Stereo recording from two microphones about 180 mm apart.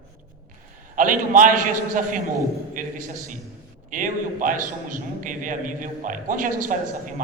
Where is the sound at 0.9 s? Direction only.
45° right (ahead or behind).